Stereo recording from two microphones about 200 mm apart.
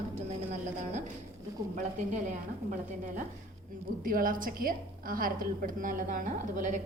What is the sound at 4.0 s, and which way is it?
A woman's voice, 45° right (ahead or behind).